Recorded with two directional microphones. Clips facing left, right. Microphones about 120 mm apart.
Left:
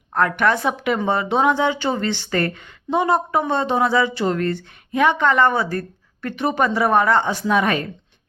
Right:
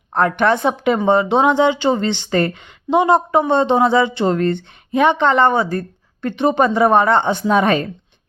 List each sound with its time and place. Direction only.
0.1 s speech: 25° right (ahead or behind)